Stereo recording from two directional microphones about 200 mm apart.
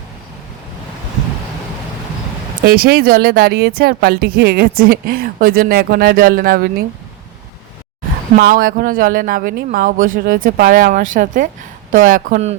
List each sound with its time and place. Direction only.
2.6 s speech: 45° right (ahead or behind)
8.4 s speech: 45° right (ahead or behind)